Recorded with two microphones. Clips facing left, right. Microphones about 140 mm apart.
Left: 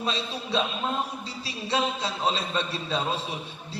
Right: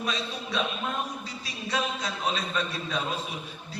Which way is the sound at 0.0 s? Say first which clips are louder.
Left 2 dB; 30° left (ahead or behind).